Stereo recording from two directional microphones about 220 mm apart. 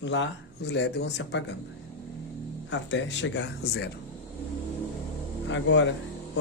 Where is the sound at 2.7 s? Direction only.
55° left (ahead or behind).